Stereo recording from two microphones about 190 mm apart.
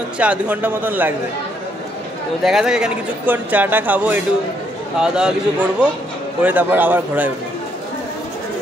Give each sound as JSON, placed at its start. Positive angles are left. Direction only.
{"t": 0.2, "sound": "a man's voice", "side_deg": -5}
{"t": 2.4, "sound": "a man's voice", "side_deg": -5}